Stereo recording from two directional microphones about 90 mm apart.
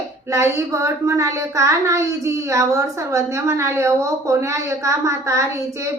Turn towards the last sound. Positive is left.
turn(degrees=-35)  # may be behind; listen again after turning